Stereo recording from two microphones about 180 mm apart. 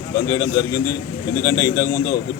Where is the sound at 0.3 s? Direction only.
25° left (ahead or behind).